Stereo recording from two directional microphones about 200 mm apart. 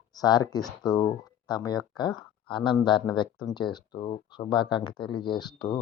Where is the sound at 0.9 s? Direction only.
20° left (ahead or behind).